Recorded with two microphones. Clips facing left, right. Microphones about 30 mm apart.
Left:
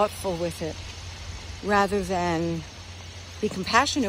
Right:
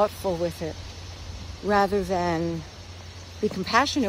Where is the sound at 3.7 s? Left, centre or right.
Centre.